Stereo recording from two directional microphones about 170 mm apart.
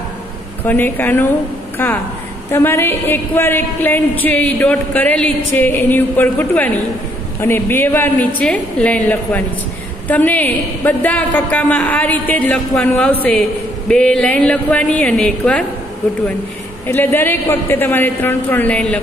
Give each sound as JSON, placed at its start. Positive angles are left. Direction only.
{"t": 0.7, "sound": "a woman's voice", "side_deg": 10}
{"t": 16.8, "sound": "a woman's voice", "side_deg": 10}